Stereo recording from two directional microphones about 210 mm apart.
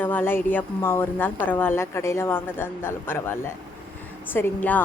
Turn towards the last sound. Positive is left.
turn(degrees=10)  # may be behind; listen again after turning